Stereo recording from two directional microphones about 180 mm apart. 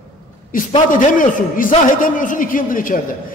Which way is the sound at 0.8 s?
45° left (ahead or behind).